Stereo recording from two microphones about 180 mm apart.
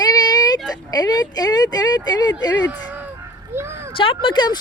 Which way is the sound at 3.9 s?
30° left (ahead or behind).